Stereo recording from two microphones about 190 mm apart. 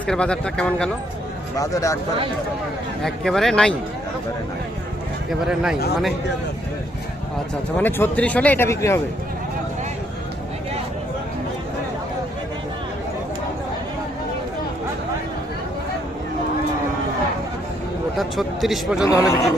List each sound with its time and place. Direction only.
0.1 s speech: 5° left (ahead or behind)
1.5 s speech: 15° left (ahead or behind)
3.0 s speech: centre (ahead or behind)
5.3 s speech: 5° right (ahead or behind)
7.8 s speech: 10° left (ahead or behind)
18.2 s speech: centre (ahead or behind)
19.0 s speech: 15° left (ahead or behind)